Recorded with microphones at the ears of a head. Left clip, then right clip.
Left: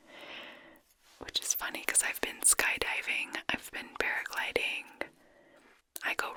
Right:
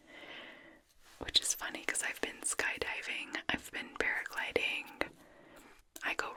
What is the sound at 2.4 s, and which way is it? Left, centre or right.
Speech, left.